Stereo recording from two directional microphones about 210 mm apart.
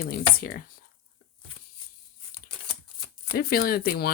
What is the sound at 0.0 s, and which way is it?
Speech, 45° left (ahead or behind).